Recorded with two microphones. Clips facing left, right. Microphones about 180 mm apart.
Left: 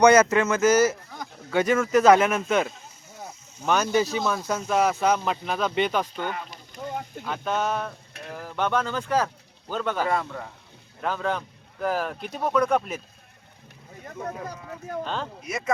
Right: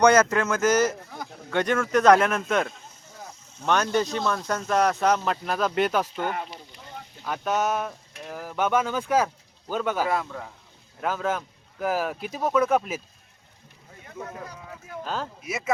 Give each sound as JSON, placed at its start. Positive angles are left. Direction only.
{"t": 0.0, "sound": "speech", "side_deg": 10}
{"t": 6.5, "sound": "a sound", "side_deg": 45}
{"t": 7.3, "sound": "speech", "side_deg": -5}
{"t": 15.0, "sound": "speech", "side_deg": -5}